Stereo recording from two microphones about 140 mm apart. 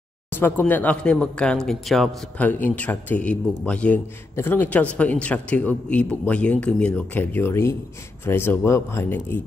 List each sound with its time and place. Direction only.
0.3 s speech: 15° left (ahead or behind)